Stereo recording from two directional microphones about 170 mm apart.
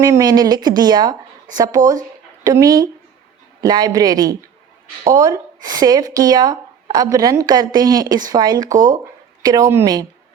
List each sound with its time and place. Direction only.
0.0 s speech: 20° right (ahead or behind)